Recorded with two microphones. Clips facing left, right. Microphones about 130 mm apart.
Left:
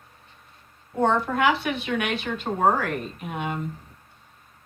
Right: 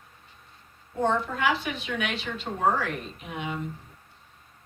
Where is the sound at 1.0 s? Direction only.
60° left (ahead or behind).